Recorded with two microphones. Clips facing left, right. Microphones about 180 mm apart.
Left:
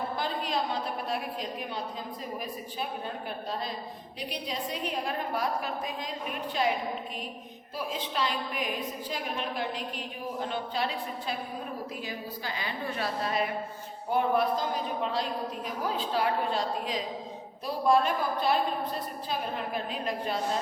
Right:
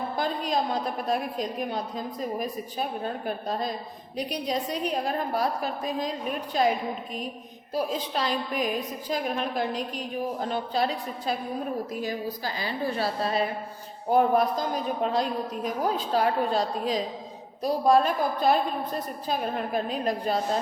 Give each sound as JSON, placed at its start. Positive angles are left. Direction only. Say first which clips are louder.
{"t": 0.2, "sound": "a sound", "louder": "right 6 dB", "side_deg": -45}
{"t": 1.0, "sound": "a woman's voice", "louder": "right 5 dB", "side_deg": -45}
{"t": 4.3, "sound": "a woman's voice", "louder": "right 5 dB", "side_deg": -40}
{"t": 7.8, "sound": "a woman's voice", "louder": "right 4 dB", "side_deg": -40}
{"t": 14.1, "sound": "a woman's voice", "louder": "right 4 dB", "side_deg": -45}